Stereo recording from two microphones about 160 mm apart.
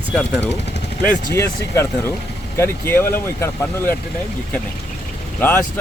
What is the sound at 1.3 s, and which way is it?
Speech, 15° left (ahead or behind).